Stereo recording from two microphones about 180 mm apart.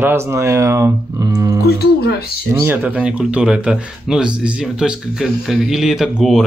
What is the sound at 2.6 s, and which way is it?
Speech, 10° right (ahead or behind).